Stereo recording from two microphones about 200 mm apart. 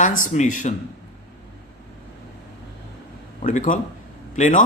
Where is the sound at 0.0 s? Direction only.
40° left (ahead or behind).